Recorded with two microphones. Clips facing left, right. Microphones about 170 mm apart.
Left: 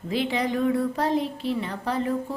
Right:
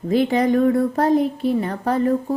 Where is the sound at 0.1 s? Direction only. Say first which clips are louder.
Right 8 dB; 50° right (ahead or behind).